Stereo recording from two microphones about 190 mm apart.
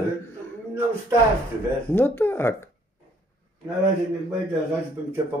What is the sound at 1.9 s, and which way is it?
Speech, 10° left (ahead or behind).